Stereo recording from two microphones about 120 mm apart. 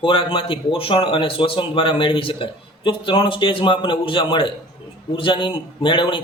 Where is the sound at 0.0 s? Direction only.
45° left (ahead or behind).